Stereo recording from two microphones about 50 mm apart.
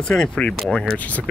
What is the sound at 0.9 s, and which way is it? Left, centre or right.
Speech, left.